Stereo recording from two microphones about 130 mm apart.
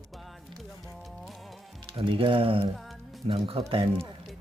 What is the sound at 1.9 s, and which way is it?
Speech, 45° right (ahead or behind).